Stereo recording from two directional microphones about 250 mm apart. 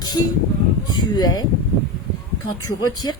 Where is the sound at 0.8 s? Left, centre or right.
Centre.